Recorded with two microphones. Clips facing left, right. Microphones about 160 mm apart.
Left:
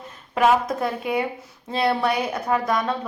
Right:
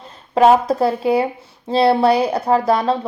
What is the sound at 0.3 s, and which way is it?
A woman's voice, 35° right (ahead or behind).